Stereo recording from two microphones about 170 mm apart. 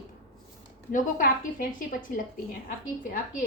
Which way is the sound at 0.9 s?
55° left (ahead or behind).